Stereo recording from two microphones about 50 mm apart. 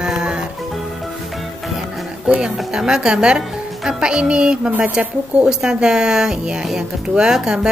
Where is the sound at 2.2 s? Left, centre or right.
Right.